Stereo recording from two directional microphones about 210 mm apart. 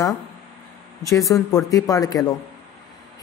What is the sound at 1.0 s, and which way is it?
Speech, 15° left (ahead or behind).